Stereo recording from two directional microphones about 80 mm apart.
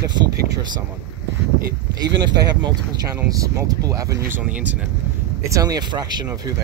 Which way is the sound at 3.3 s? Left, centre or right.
Right.